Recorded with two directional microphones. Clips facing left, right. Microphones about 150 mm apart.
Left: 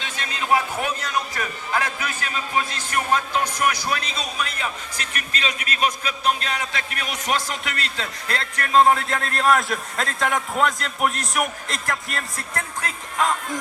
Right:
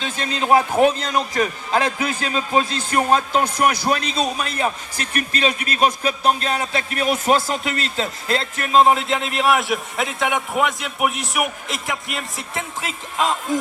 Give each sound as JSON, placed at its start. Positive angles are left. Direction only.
{"t": 0.0, "sound": "a man's voice", "side_deg": -30}
{"t": 9.4, "sound": "a man's voice", "side_deg": -5}
{"t": 12.8, "sound": "speech", "side_deg": -20}